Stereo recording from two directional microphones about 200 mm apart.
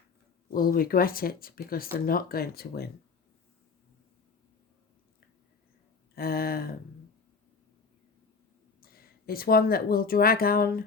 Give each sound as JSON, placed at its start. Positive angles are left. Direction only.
{"t": 0.5, "sound": "speech", "side_deg": 45}
{"t": 6.1, "sound": "speech", "side_deg": 50}
{"t": 8.8, "sound": "speech", "side_deg": 50}